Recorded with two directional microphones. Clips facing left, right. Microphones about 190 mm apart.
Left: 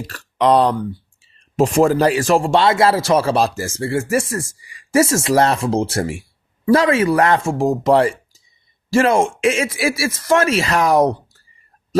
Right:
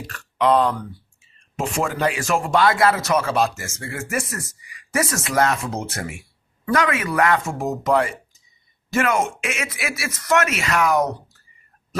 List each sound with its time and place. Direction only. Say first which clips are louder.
0.1 s speech: left 3 dB; 35° left (ahead or behind)